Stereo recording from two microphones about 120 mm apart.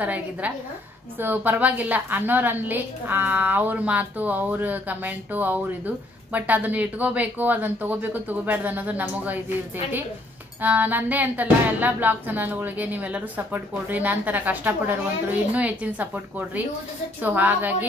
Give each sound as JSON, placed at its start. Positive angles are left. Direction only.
{"t": 0.0, "sound": "a woman's voice", "side_deg": -10}
{"t": 10.6, "sound": "a woman's voice", "side_deg": -15}